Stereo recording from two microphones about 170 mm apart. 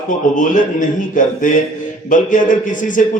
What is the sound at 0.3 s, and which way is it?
A man's voice, 50° left (ahead or behind).